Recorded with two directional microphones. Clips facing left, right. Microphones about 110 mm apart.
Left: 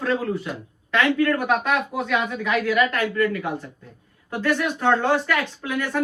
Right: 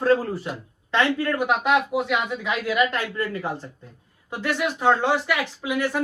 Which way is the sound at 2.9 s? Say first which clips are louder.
Left 5 dB; 30° right (ahead or behind).